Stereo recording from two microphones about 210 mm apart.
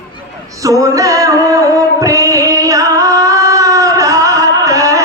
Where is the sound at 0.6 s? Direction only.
15° right (ahead or behind).